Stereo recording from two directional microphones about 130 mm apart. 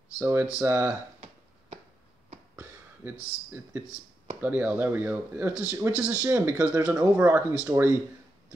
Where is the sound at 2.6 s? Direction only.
15° right (ahead or behind).